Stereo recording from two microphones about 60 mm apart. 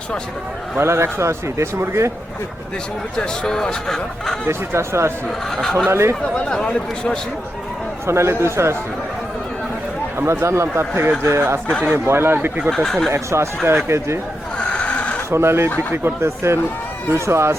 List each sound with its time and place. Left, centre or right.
0.8 s a man's voice: right
3.2 s speech: centre
4.4 s a man's voice: right
5.5 s speech: centre
5.9 s a man's voice: right
6.3 s speech: centre
8.0 s a man's voice: right
10.2 s a man's voice: right
12.7 s speech: centre
13.1 s a man's voice: right
14.6 s neigh: centre
15.3 s a man's voice: right